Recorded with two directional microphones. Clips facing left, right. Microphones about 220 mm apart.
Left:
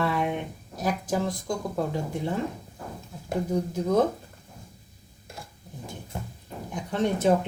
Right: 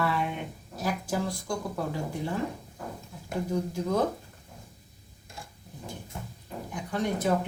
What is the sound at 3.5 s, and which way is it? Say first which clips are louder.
Speech: left 3 dB; 20° left (ahead or behind).